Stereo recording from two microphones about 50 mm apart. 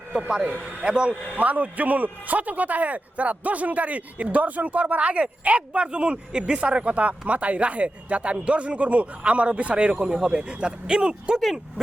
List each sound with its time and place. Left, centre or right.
0.3 s a man's voice: centre
1.4 s a man's voice: right